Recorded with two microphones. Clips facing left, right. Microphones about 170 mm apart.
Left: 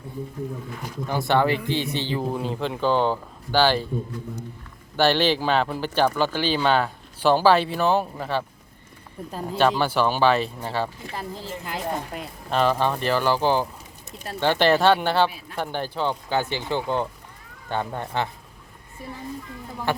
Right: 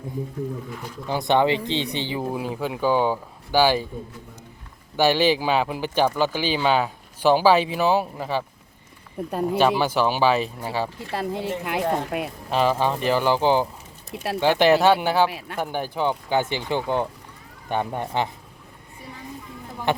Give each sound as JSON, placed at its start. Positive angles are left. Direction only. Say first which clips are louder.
{"t": 1.0, "sound": "speech", "louder": "right 1 dB", "side_deg": -15}
{"t": 4.9, "sound": "speech", "louder": "right 1 dB", "side_deg": -10}
{"t": 9.6, "sound": "speech", "louder": "even", "side_deg": -10}
{"t": 11.1, "sound": "speech", "louder": "right 7 dB", "side_deg": -70}
{"t": 12.5, "sound": "speech", "louder": "even", "side_deg": -10}
{"t": 15.3, "sound": "speech", "louder": "right 7 dB", "side_deg": -85}
{"t": 15.5, "sound": "speech", "louder": "right 1 dB", "side_deg": -10}
{"t": 19.9, "sound": "speech", "louder": "right 2 dB", "side_deg": -20}